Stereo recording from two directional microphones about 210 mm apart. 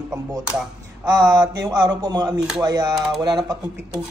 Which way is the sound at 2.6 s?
20° right (ahead or behind).